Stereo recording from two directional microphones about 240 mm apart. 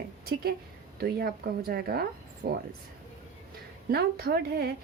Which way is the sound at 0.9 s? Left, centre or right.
Right.